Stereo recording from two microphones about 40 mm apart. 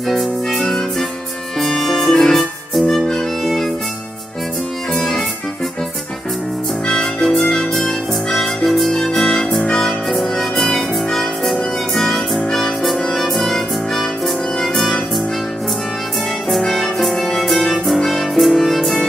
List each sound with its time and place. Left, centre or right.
0.1 s music: centre
4.9 s music: centre
6.9 s music: left
7.2 s music: centre
16.4 s music: centre